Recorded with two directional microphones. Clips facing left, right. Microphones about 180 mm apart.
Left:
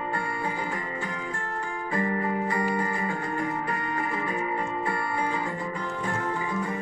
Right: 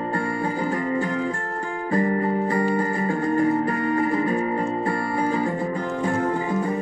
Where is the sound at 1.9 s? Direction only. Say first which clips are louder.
Right 6 dB; 40° right (ahead or behind).